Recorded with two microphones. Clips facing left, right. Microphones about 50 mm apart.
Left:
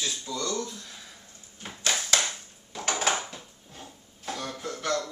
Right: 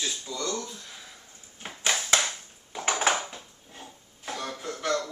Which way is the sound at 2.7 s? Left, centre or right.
Centre.